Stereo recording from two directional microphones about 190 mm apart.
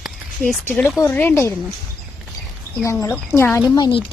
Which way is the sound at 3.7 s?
20° left (ahead or behind).